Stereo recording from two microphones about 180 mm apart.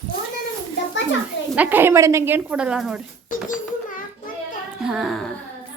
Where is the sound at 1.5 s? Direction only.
10° right (ahead or behind).